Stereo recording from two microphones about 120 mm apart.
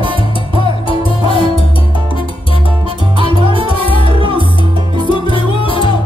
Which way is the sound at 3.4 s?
45° right (ahead or behind).